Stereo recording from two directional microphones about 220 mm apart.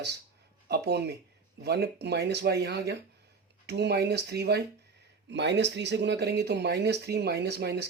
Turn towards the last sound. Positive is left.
turn(degrees=-50)  # may be behind; listen again after turning